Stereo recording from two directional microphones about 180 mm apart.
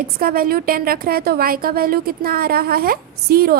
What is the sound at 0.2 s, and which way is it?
A woman's voice, 55° right (ahead or behind).